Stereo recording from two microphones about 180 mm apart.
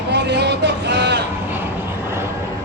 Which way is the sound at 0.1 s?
70° right (ahead or behind).